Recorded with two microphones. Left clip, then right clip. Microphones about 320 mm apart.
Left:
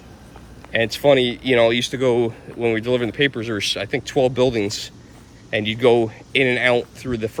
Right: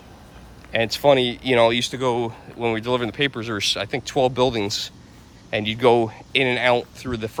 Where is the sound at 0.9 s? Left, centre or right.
Centre.